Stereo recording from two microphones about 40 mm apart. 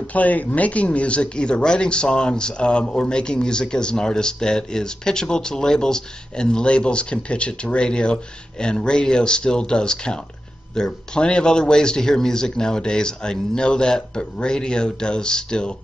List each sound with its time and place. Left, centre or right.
0.0 s speech: left